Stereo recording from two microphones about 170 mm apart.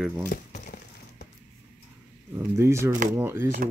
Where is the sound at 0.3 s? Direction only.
50° left (ahead or behind).